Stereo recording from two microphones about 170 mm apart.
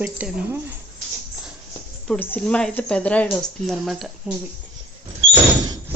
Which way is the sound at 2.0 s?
10° left (ahead or behind).